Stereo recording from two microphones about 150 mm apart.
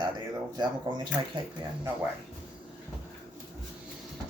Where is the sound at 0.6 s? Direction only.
30° right (ahead or behind).